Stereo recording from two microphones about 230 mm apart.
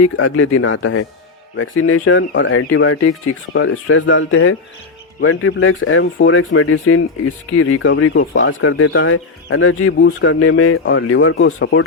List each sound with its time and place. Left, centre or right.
0.2 s speech: left